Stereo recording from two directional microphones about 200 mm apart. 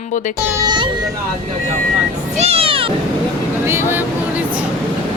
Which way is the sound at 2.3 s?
30° right (ahead or behind).